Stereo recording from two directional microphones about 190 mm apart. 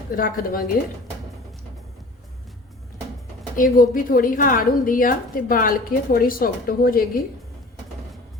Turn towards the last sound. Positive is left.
turn(degrees=50)  # may be behind; listen again after turning